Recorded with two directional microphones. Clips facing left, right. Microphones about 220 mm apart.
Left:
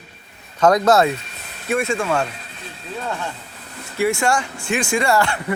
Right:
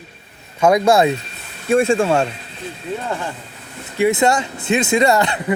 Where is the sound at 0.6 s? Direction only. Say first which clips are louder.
Right 1 dB; 10° right (ahead or behind).